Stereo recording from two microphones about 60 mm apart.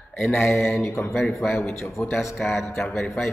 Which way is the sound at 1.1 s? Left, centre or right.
Centre.